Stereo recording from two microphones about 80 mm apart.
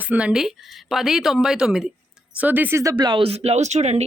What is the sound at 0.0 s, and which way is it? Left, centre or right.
Speech, centre.